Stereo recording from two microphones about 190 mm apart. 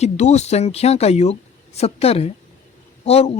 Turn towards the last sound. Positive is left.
turn(degrees=30)  # may be behind; listen again after turning